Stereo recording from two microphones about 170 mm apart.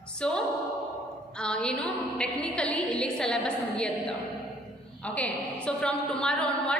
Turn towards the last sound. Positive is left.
turn(degrees=5)  # may be behind; listen again after turning